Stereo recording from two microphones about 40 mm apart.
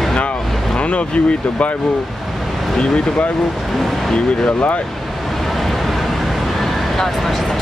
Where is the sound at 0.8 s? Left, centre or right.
Left.